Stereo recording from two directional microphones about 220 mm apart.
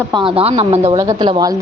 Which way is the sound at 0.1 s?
25° right (ahead or behind).